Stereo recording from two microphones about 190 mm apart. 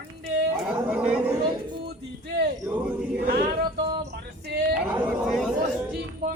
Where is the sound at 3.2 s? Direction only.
55° right (ahead or behind).